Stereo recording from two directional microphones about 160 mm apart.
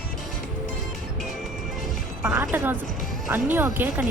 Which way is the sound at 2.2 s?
15° right (ahead or behind).